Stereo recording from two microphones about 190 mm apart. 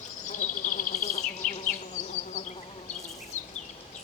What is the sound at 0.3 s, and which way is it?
Bee, 40° left (ahead or behind).